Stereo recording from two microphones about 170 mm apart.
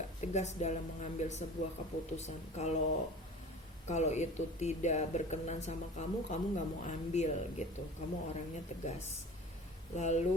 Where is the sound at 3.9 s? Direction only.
40° left (ahead or behind).